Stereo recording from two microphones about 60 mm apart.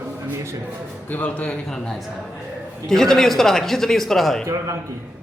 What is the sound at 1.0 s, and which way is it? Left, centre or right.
Speech, left.